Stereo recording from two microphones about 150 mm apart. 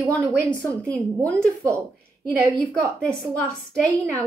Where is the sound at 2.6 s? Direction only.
10° left (ahead or behind).